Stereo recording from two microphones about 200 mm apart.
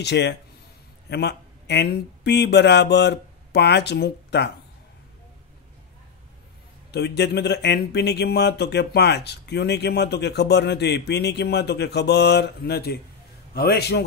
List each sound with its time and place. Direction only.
0.0 s speech: 60° left (ahead or behind)
6.9 s a man's voice: 55° left (ahead or behind)